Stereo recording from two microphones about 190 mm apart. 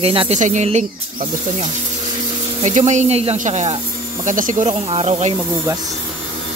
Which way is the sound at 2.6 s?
40° right (ahead or behind).